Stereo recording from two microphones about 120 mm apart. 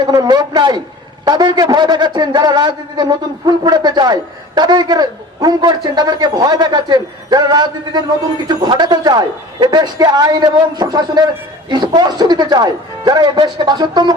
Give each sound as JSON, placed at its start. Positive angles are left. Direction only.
{"t": 0.0, "sound": "a man's voice", "side_deg": -35}